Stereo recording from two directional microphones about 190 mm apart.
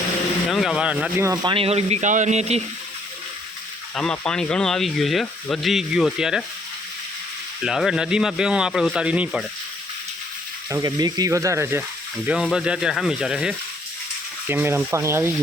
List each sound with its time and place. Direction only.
0.5 s speech: centre (ahead or behind); by 2.6 s 35° right (ahead or behind)
3.9 s speech: 5° left (ahead or behind)
7.6 s speech: centre (ahead or behind)
10.7 s speech: 20° right (ahead or behind)
12.2 s speech: 5° right (ahead or behind)